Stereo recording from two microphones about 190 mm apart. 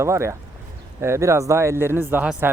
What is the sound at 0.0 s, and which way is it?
Speech, 15° right (ahead or behind).